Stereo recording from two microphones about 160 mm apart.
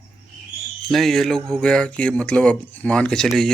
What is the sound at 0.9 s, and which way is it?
Speech, centre (ahead or behind).